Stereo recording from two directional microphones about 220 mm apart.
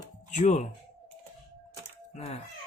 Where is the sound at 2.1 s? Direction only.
30° left (ahead or behind).